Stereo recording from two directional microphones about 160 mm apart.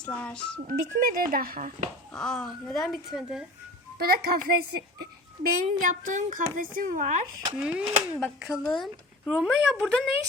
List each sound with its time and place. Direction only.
0.0 s speech: 10° left (ahead or behind)
0.7 s speech: 55° right (ahead or behind)
2.1 s speech: 5° left (ahead or behind)
3.9 s a child's voice: 75° right (ahead or behind)
5.6 s a woman's voice: 50° right (ahead or behind)
7.6 s speech: 5° right (ahead or behind)